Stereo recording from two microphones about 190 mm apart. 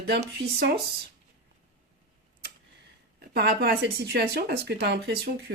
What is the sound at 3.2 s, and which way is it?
Speech, 55° right (ahead or behind).